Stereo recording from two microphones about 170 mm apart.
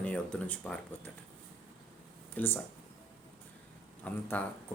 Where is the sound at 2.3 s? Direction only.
10° left (ahead or behind).